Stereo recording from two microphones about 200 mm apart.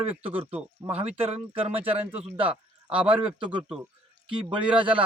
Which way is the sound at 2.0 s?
10° right (ahead or behind).